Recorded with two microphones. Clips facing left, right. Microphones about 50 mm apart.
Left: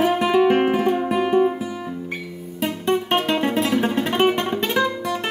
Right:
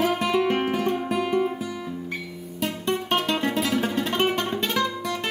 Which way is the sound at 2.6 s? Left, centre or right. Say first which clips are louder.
Left 5 dB; left.